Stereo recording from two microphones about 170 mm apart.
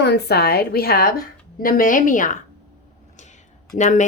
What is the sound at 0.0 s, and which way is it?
A woman's voice, 75° left (ahead or behind).